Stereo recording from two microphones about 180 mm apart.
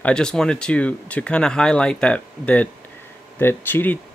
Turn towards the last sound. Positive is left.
turn(degrees=10)  # may be behind; listen again after turning